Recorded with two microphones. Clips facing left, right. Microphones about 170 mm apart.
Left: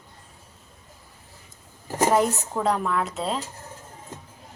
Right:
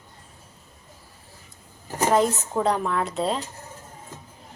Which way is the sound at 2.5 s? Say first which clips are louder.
Right 1 dB; centre (ahead or behind).